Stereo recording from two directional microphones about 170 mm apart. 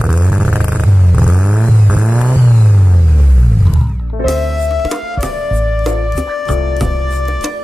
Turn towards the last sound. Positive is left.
turn(degrees=0)  # may be behind; listen again after turning